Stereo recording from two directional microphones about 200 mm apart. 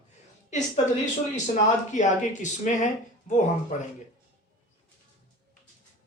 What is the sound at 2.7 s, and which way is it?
Speech, 35° left (ahead or behind).